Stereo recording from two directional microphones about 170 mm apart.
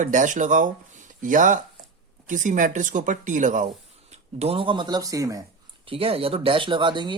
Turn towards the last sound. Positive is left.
turn(degrees=-25)  # may be behind; listen again after turning